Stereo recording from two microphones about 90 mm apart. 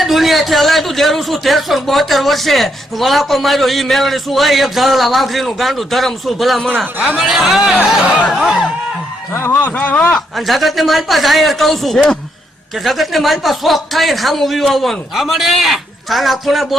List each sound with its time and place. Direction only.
0.0 s a man's voice: centre (ahead or behind)
9.3 s speech: 30° left (ahead or behind)
9.6 s speech: 15° left (ahead or behind)
10.3 s a man's voice: centre (ahead or behind)